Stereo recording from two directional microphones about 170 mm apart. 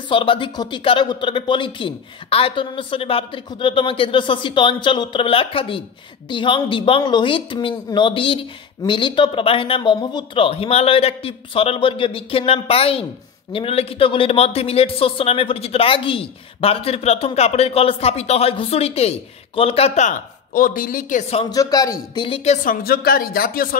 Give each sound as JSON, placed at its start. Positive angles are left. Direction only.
{"t": 0.1, "sound": "speech", "side_deg": 30}
{"t": 21.5, "sound": "speech", "side_deg": 20}